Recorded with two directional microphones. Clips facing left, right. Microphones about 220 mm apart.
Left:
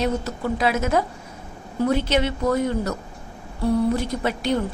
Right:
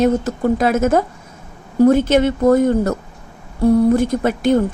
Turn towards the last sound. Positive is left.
turn(degrees=-50)  # may be behind; listen again after turning